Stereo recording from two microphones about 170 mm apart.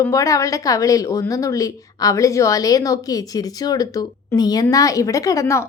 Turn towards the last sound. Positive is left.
turn(degrees=15)  # may be behind; listen again after turning